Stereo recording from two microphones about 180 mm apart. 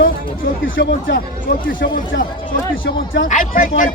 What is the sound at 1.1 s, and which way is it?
Speech, 50° left (ahead or behind).